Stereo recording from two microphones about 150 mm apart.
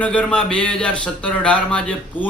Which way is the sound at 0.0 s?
10° left (ahead or behind).